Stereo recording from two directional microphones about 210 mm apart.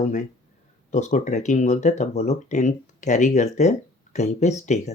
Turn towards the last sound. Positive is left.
turn(degrees=35)  # may be behind; listen again after turning